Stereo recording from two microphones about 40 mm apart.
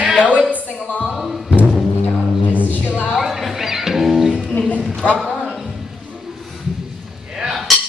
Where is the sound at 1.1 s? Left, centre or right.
Centre.